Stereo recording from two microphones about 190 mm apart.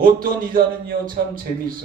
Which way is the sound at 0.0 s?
50° right (ahead or behind).